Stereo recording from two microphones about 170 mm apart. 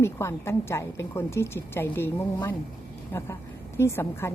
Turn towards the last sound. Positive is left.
turn(degrees=15)  # may be behind; listen again after turning